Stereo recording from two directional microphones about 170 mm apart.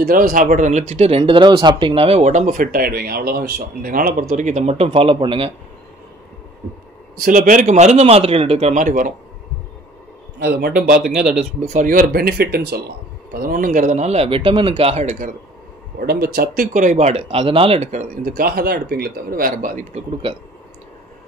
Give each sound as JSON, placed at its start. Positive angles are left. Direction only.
{"t": 0.0, "sound": "speech", "side_deg": -60}
{"t": 7.2, "sound": "speech", "side_deg": -55}
{"t": 10.4, "sound": "speech", "side_deg": -65}
{"t": 11.1, "sound": "speech", "side_deg": -5}
{"t": 11.6, "sound": "speech", "side_deg": -45}
{"t": 16.0, "sound": "speech", "side_deg": -65}
{"t": 18.3, "sound": "speech", "side_deg": -60}
{"t": 20.2, "sound": "speech", "side_deg": -30}